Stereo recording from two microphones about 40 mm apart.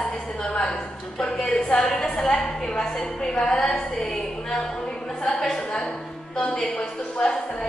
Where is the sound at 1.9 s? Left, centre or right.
Centre.